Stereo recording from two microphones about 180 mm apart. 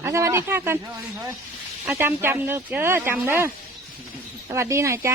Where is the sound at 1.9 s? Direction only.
10° right (ahead or behind).